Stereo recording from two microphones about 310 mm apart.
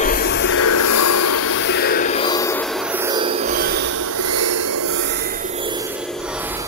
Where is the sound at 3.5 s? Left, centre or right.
Right.